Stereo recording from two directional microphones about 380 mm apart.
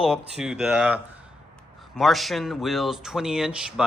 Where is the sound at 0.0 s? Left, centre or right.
Centre.